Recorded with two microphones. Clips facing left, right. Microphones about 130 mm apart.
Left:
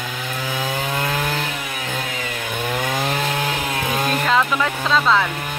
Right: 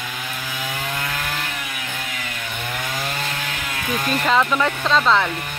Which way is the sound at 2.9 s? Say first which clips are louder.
Left 4 dB; 30° left (ahead or behind).